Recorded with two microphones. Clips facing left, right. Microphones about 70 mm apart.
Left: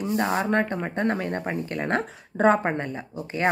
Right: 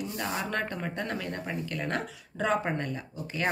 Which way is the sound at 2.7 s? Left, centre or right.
Left.